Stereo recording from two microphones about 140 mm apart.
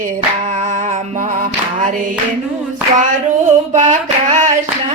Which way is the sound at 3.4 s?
60° right (ahead or behind).